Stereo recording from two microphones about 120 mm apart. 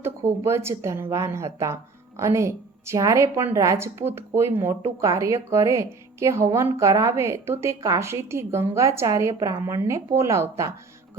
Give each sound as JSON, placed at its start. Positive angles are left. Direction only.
{"t": 0.0, "sound": "speech", "side_deg": -20}